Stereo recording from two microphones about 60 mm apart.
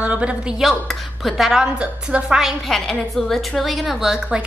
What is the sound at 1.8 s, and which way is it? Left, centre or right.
Speech, centre.